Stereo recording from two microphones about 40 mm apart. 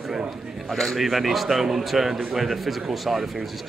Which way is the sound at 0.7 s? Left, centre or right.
Centre.